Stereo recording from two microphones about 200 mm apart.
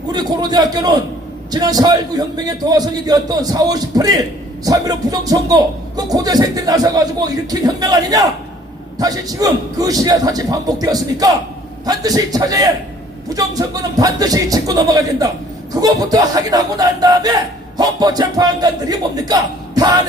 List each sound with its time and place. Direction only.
0.1 s a man's voice: 20° right (ahead or behind)